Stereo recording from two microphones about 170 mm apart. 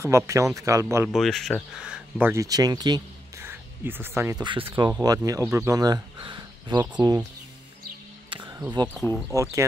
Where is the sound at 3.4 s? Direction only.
10° right (ahead or behind).